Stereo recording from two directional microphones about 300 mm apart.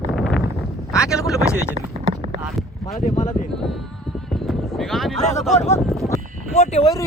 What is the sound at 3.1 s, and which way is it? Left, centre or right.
Speech, left.